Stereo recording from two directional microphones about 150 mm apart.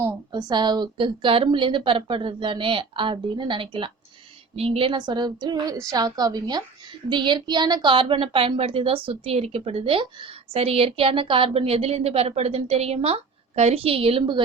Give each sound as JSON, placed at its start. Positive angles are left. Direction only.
{"t": 0.3, "sound": "a woman's voice", "side_deg": -30}